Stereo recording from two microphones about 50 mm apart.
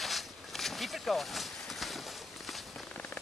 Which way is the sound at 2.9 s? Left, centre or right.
Left.